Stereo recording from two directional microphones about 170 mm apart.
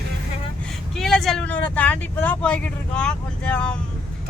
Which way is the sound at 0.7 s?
Centre (ahead or behind).